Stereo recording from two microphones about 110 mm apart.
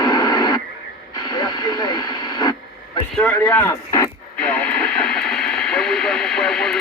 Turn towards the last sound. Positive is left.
turn(degrees=5)  # may be behind; listen again after turning